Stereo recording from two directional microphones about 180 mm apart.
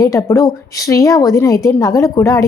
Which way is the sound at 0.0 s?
20° left (ahead or behind).